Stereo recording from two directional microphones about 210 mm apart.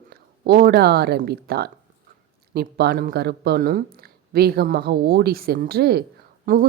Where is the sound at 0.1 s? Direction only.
45° right (ahead or behind).